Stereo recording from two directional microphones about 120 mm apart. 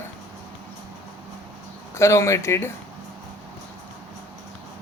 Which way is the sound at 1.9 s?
25° left (ahead or behind).